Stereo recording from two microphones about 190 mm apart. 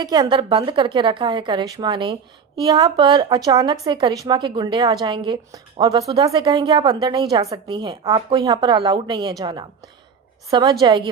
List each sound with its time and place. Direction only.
0.0 s a woman's voice: 20° right (ahead or behind)